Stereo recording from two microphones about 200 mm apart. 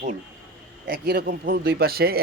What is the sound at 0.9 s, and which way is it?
Speech, 50° right (ahead or behind).